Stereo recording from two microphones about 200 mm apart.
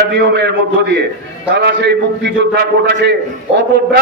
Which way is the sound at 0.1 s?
60° right (ahead or behind).